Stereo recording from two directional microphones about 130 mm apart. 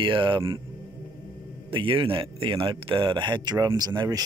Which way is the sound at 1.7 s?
40° right (ahead or behind).